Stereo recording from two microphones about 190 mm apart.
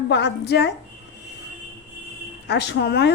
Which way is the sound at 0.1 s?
60° left (ahead or behind).